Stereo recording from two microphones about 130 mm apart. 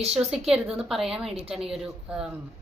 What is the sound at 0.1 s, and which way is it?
A woman's voice, 5° right (ahead or behind).